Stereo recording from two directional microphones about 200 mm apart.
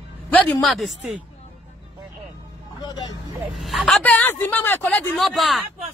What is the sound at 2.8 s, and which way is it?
Vehicle, 20° left (ahead or behind).